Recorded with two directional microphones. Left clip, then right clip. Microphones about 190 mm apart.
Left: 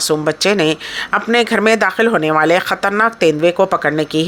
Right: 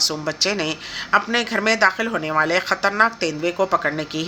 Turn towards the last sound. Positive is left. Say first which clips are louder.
# left 6 dB
turn(degrees=45)  # may be behind; listen again after turning